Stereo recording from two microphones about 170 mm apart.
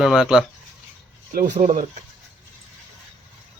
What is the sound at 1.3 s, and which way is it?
Speech, 50° right (ahead or behind).